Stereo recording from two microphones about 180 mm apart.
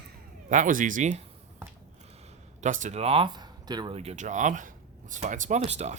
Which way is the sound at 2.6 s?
40° right (ahead or behind).